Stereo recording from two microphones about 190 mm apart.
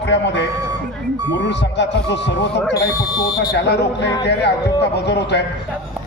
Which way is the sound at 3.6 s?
60° left (ahead or behind).